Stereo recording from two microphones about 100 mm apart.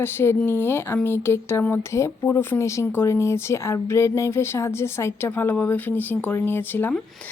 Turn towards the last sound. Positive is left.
turn(degrees=20)  # may be behind; listen again after turning